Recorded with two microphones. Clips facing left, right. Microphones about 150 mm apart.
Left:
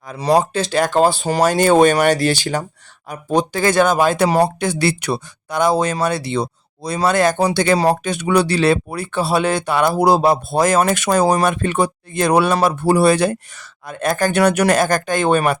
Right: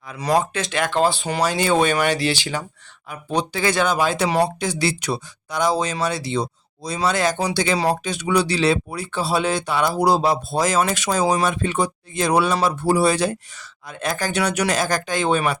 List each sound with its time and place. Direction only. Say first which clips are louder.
0.1 s speech: left 4 dB; 30° left (ahead or behind); by 15.5 s 55° left (ahead or behind)